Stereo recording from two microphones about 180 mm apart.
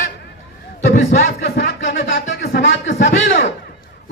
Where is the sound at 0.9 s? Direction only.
60° left (ahead or behind); by 2.9 s 85° left.